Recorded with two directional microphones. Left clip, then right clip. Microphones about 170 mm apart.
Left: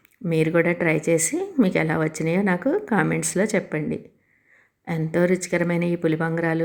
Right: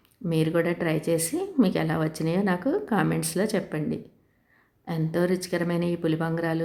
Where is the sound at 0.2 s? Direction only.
20° left (ahead or behind).